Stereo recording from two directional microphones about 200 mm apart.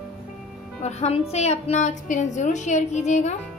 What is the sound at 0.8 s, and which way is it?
A woman's voice, 35° left (ahead or behind).